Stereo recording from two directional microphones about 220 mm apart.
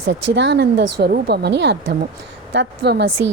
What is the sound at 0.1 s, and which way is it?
Speech, 55° right (ahead or behind).